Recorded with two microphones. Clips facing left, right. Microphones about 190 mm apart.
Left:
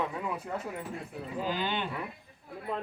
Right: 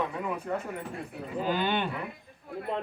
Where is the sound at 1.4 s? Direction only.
60° right (ahead or behind).